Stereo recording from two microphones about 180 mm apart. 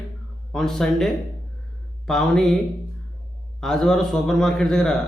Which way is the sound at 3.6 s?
5° left (ahead or behind).